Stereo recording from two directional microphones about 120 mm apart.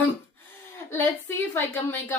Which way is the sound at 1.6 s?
20° left (ahead or behind).